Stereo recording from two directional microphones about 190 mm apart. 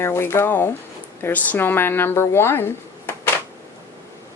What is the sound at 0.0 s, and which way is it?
Speech, 15° left (ahead or behind).